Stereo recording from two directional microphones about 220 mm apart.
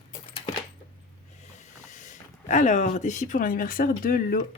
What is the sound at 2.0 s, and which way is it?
Speech, 35° left (ahead or behind).